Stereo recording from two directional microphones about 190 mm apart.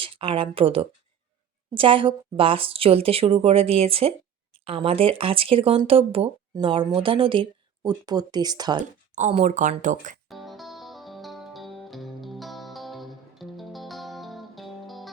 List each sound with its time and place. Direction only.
0.0 s speech: 30° right (ahead or behind)
9.1 s speech: 40° right (ahead or behind)
10.2 s music: centre (ahead or behind)